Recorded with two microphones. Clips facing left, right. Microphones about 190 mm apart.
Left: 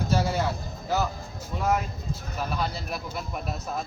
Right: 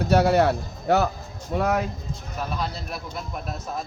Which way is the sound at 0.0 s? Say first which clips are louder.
Right 8 dB; 65° right (ahead or behind).